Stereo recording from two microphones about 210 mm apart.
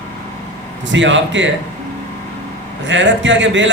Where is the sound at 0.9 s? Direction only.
60° right (ahead or behind).